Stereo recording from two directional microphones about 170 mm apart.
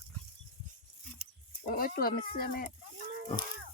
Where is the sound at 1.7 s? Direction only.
60° left (ahead or behind).